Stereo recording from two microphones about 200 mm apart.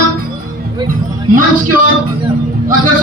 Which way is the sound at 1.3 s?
45° right (ahead or behind).